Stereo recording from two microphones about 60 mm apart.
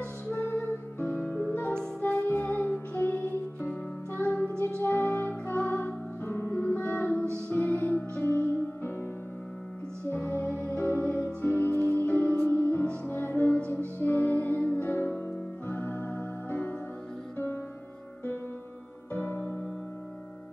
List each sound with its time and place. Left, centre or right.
0.6 s music: left
4.6 s music: right
4.8 s music: left
10.3 s music: left
15.7 s organ: left
19.1 s music: left